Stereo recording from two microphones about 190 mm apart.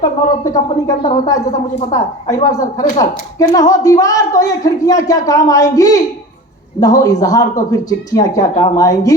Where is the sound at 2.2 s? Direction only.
20° left (ahead or behind).